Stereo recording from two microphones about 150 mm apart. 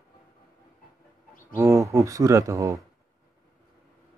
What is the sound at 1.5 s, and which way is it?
Speech, 20° right (ahead or behind).